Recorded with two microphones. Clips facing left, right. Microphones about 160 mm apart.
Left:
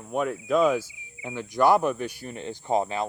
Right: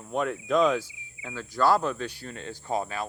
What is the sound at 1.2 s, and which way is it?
Speech, 20° left (ahead or behind).